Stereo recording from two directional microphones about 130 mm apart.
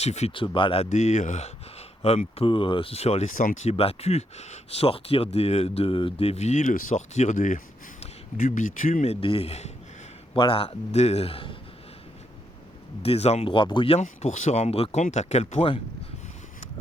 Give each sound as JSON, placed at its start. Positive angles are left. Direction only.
{"t": 0.0, "sound": "speech", "side_deg": 55}
{"t": 0.3, "sound": "speech", "side_deg": 40}
{"t": 0.9, "sound": "speech", "side_deg": 65}
{"t": 2.0, "sound": "speech", "side_deg": 50}
{"t": 9.2, "sound": "speech", "side_deg": 50}
{"t": 10.3, "sound": "speech", "side_deg": 45}
{"t": 13.0, "sound": "speech", "side_deg": 50}
{"t": 14.0, "sound": "speech", "side_deg": 65}